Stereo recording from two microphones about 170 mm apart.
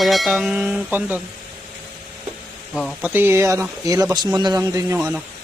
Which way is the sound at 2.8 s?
Centre (ahead or behind).